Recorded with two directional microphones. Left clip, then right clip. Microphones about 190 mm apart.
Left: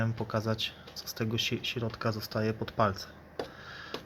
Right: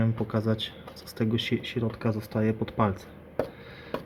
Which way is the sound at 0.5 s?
90° left.